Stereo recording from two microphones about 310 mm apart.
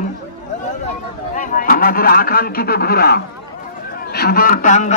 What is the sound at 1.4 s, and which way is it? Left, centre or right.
A man's voice, left.